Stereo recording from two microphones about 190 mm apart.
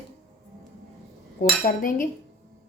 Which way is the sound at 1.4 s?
45° left (ahead or behind).